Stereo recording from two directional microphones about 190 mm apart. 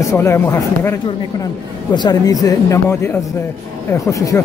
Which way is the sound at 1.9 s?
20° left (ahead or behind).